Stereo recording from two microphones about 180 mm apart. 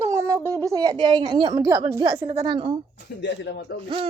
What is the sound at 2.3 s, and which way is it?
Speech, 30° right (ahead or behind).